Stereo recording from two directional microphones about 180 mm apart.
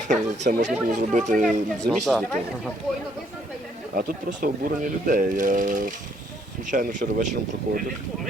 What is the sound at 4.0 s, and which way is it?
Speech, 55° right (ahead or behind).